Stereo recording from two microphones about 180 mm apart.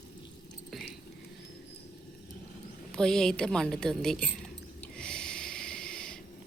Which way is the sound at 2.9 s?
5° left (ahead or behind).